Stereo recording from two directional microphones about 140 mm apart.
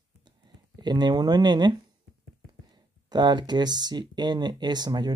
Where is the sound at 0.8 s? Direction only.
30° right (ahead or behind).